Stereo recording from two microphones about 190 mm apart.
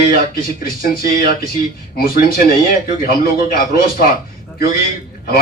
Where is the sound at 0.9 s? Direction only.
50° left (ahead or behind).